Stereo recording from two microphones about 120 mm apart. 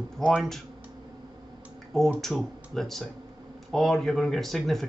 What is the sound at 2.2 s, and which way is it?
Speech, centre (ahead or behind).